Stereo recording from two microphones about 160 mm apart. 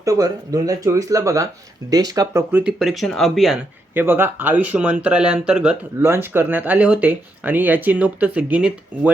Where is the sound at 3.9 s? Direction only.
15° right (ahead or behind).